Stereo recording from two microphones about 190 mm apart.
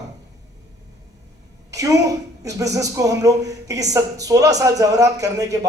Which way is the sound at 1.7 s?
15° right (ahead or behind).